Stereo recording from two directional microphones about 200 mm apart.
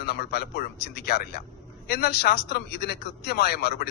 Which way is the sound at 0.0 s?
50° left (ahead or behind).